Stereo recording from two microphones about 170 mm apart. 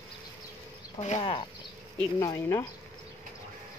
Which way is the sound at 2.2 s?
20° left (ahead or behind).